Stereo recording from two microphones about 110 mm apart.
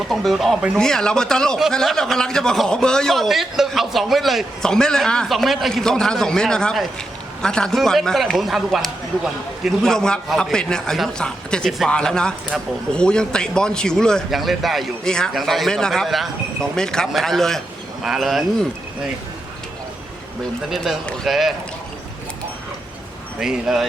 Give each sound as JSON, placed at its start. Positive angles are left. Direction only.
{"t": 0.1, "sound": "speech", "side_deg": 0}
{"t": 20.7, "sound": "speech", "side_deg": 0}
{"t": 23.4, "sound": "speech", "side_deg": -5}